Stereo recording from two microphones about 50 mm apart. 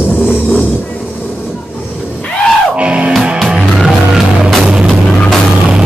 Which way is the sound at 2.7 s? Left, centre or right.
Right.